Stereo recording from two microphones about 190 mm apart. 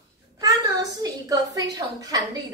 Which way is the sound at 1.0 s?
20° right (ahead or behind).